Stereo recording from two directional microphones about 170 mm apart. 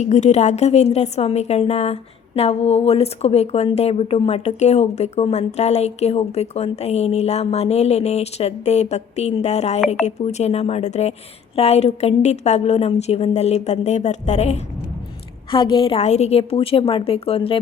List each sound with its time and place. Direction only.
0.0 s a woman's voice: 45° left (ahead or behind)
15.5 s a woman's voice: 30° left (ahead or behind)